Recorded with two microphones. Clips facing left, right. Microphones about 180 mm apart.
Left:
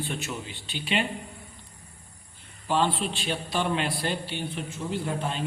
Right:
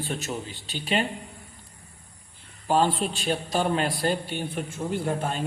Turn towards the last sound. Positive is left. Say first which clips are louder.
# right 3 dB
turn(degrees=-50)  # may be behind; listen again after turning